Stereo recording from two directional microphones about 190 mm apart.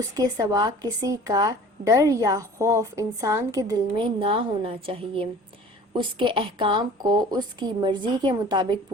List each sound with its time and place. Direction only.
0.0 s speech: 20° right (ahead or behind)